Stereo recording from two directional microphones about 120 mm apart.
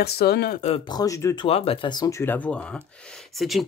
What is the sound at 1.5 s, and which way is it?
Speech, 55° left (ahead or behind).